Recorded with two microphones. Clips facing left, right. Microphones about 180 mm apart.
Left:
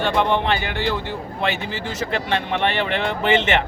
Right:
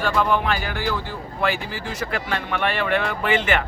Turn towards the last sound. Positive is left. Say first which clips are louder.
# left 3 dB
turn(degrees=25)  # may be behind; listen again after turning